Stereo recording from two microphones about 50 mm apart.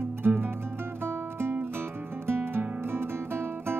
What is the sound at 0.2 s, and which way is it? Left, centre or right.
Music, right.